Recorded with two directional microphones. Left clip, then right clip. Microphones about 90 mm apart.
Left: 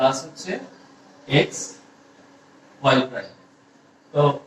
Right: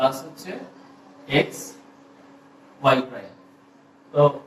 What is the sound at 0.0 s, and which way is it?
A man's voice, 35° left (ahead or behind).